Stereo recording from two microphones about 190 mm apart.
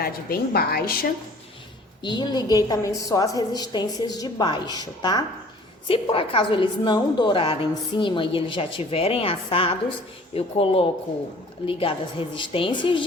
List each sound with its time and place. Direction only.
0.0 s a woman's voice: 50° left (ahead or behind)
2.0 s a woman's voice: 25° left (ahead or behind)